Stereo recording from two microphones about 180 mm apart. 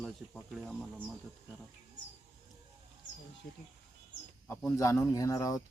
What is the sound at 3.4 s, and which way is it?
Speech, 60° left (ahead or behind).